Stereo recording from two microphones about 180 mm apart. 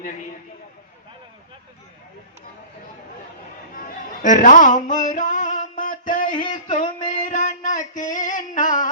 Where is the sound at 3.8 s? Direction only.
45° left (ahead or behind).